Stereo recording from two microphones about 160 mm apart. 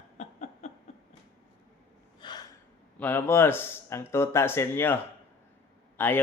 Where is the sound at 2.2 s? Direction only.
25° left (ahead or behind).